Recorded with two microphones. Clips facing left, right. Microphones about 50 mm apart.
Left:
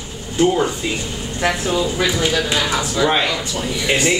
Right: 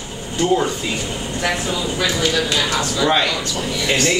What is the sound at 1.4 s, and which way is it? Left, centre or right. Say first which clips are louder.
Speech: left 4 dB; centre.